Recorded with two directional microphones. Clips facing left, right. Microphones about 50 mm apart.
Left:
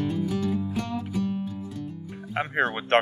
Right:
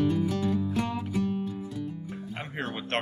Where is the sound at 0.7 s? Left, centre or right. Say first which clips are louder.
Even; centre.